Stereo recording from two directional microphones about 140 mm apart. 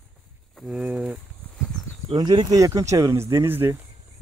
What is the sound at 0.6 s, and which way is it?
Speech, 5° right (ahead or behind).